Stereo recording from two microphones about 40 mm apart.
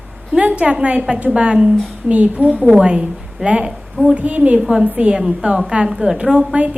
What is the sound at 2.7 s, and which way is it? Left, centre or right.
A woman's voice, right.